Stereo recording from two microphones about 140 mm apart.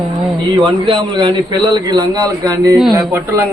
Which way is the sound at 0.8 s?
35° right (ahead or behind).